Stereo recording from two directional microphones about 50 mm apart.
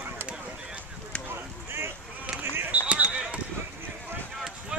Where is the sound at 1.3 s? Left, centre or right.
Right.